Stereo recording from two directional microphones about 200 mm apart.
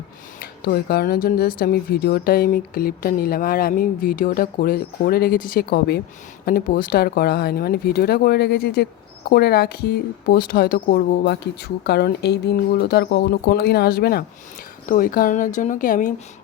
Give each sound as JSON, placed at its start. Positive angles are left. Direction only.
{"t": 0.3, "sound": "speech", "side_deg": 50}